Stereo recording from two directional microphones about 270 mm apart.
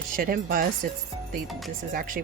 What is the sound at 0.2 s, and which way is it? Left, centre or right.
Speech, right.